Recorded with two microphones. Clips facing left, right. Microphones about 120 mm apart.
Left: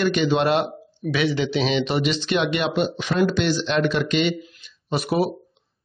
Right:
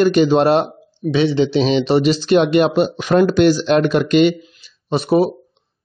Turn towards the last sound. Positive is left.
turn(degrees=-30)  # may be behind; listen again after turning